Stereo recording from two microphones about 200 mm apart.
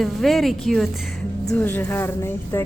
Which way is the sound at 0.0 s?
Centre (ahead or behind).